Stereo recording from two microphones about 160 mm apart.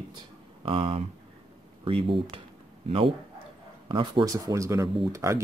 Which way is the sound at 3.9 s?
30° right (ahead or behind).